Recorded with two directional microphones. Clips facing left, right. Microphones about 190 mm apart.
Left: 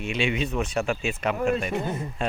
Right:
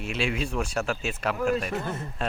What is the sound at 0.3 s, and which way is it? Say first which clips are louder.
Speech: left 2 dB; 5° left (ahead or behind).